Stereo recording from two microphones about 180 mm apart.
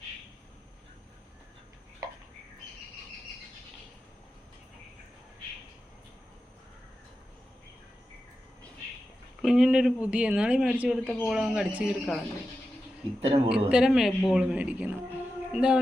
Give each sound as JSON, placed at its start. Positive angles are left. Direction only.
{"t": 9.4, "sound": "speech", "side_deg": 0}
{"t": 13.2, "sound": "a man's voice", "side_deg": -30}
{"t": 13.7, "sound": "speech", "side_deg": -5}